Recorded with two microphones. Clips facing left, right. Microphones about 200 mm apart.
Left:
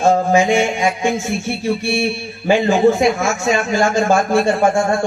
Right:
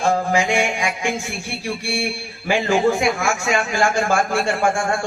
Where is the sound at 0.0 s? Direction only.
20° left (ahead or behind).